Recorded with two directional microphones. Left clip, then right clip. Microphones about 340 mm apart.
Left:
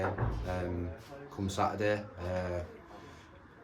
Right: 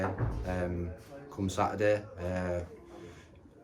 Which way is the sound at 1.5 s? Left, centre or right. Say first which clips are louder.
Right 3 dB; centre.